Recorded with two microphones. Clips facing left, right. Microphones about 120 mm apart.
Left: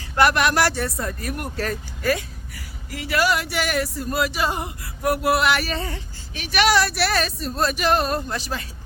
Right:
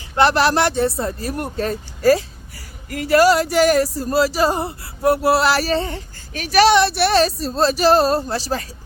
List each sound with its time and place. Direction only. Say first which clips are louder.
0.2 s speech: right 3 dB; 30° right (ahead or behind)
2.0 s speech: right 10 dB; 35° right (ahead or behind)
6.7 s speech: right 6 dB; 25° right (ahead or behind)